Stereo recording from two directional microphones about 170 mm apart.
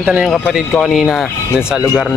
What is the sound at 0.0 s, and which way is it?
Speech, 10° right (ahead or behind).